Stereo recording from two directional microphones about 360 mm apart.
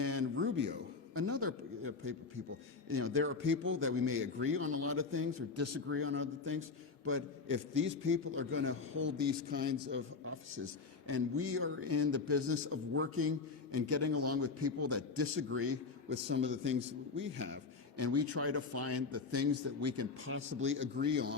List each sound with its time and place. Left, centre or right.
0.0 s a sound: right
2.9 s a man's voice: right
11.0 s a man's voice: right
17.9 s a man's voice: right